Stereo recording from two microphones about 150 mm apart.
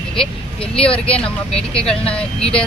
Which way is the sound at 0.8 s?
40° left (ahead or behind).